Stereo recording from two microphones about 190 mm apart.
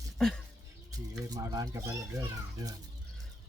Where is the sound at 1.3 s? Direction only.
20° right (ahead or behind).